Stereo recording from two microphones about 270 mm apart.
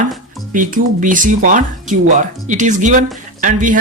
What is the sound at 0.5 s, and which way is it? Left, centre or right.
Speech, right.